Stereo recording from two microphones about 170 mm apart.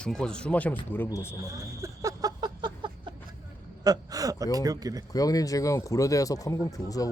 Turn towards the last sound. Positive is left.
turn(degrees=20)  # may be behind; listen again after turning